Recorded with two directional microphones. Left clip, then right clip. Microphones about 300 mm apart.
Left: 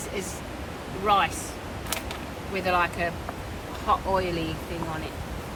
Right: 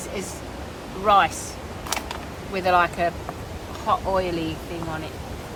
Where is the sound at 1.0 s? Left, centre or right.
Centre.